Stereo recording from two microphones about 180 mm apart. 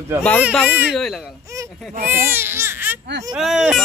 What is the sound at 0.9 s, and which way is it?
Speech, centre (ahead or behind).